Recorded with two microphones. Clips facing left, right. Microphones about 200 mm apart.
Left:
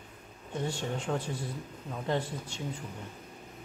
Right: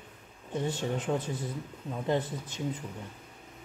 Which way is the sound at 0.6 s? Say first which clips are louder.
Right 2 dB; 20° right (ahead or behind).